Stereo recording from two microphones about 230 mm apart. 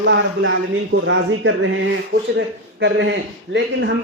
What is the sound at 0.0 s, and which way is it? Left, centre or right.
A man's voice, right.